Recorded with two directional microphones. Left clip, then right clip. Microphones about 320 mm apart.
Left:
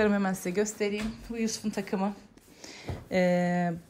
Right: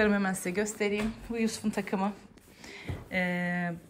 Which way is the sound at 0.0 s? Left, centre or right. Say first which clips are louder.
Even; centre.